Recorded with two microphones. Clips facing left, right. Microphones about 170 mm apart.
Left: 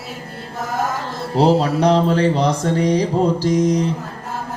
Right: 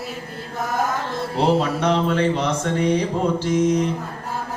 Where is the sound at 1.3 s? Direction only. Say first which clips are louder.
Left 5 dB; 35° left (ahead or behind).